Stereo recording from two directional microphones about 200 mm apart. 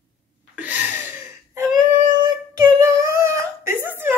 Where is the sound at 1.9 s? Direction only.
20° right (ahead or behind).